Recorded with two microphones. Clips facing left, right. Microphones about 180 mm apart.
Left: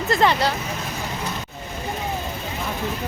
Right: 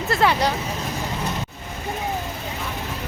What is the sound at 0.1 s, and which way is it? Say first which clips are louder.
Speech: left 1 dB; 5° right (ahead or behind).